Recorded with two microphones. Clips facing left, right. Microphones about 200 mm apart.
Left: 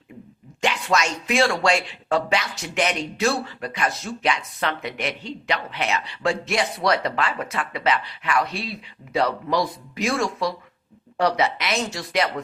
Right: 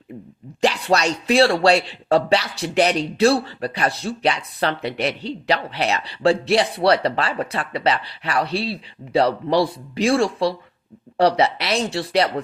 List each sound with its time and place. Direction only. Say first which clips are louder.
0.6 s speech: right 4 dB; 35° right (ahead or behind)